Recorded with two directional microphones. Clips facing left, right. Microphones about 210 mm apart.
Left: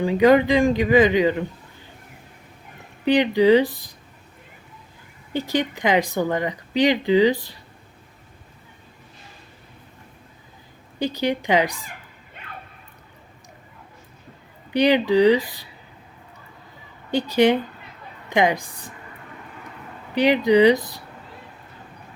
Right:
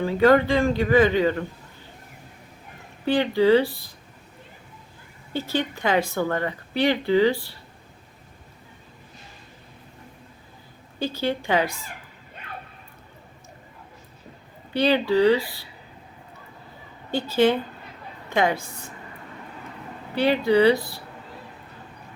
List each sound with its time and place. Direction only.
0.0 s speech: 15° left (ahead or behind)
3.0 s speech: 15° left (ahead or behind)
5.3 s speech: 15° left (ahead or behind)
11.0 s speech: 15° left (ahead or behind)
14.7 s speech: 15° left (ahead or behind)
17.1 s a woman's voice: 15° left (ahead or behind)
20.1 s speech: 15° left (ahead or behind)